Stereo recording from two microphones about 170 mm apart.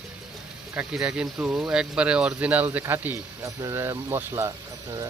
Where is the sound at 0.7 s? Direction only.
5° right (ahead or behind).